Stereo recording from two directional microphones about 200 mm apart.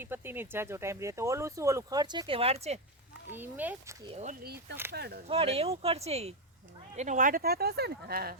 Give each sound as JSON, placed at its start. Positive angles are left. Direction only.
{"t": 0.0, "sound": "speech", "side_deg": -10}
{"t": 3.2, "sound": "speech", "side_deg": -10}
{"t": 4.0, "sound": "speech", "side_deg": -25}
{"t": 4.3, "sound": "speech", "side_deg": -50}
{"t": 5.3, "sound": "speech", "side_deg": -30}